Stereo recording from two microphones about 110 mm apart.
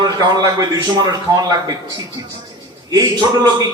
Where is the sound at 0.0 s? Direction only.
40° right (ahead or behind).